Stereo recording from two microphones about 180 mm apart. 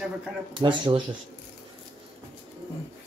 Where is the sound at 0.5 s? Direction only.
25° right (ahead or behind).